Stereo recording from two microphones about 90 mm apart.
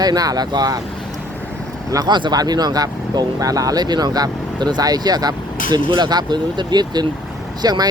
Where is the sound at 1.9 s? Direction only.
50° right (ahead or behind).